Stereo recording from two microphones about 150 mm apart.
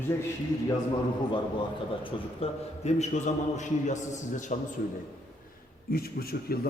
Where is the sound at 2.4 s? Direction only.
50° left (ahead or behind).